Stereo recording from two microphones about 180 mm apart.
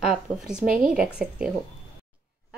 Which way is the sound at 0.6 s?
50° right (ahead or behind).